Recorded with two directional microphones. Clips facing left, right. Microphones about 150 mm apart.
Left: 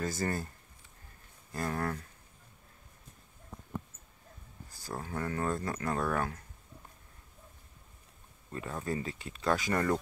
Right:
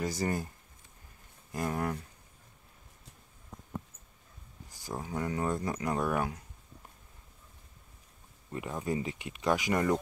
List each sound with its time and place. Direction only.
0.0 s speech: 15° right (ahead or behind)
1.5 s speech: 15° right (ahead or behind)
4.6 s speech: 15° right (ahead or behind)
8.5 s speech: 15° right (ahead or behind)